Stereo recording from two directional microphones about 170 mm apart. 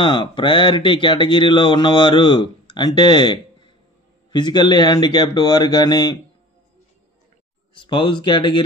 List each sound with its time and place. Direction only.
0.0 s speech: 30° left (ahead or behind)
7.7 s speech: 30° left (ahead or behind)